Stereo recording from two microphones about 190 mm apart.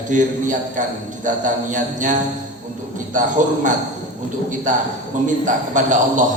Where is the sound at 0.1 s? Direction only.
40° right (ahead or behind).